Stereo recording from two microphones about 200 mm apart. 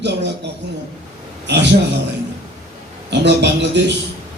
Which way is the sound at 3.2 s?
60° right (ahead or behind).